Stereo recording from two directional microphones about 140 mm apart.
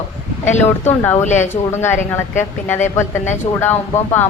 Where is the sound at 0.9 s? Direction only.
15° left (ahead or behind).